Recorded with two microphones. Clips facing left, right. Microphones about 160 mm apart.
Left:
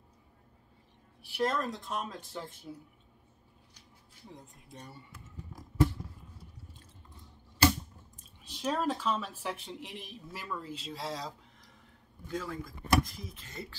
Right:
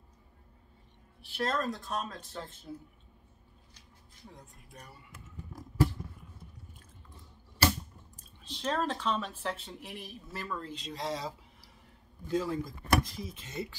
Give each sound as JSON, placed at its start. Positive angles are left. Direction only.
{"t": 1.2, "sound": "speech", "side_deg": 15}
{"t": 4.3, "sound": "speech", "side_deg": 20}
{"t": 8.2, "sound": "speech", "side_deg": 10}
{"t": 10.5, "sound": "speech", "side_deg": 5}
{"t": 12.3, "sound": "speech", "side_deg": -25}